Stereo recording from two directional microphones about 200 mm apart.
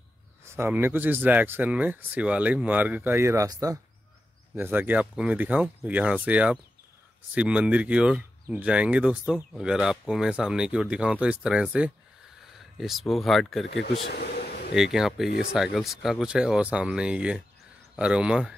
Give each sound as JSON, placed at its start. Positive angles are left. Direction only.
{"t": 0.6, "sound": "speech", "side_deg": -10}
{"t": 4.6, "sound": "speech", "side_deg": -10}
{"t": 13.7, "sound": "speech", "side_deg": 55}
{"t": 14.1, "sound": "a sound", "side_deg": 50}
{"t": 14.8, "sound": "speech", "side_deg": 0}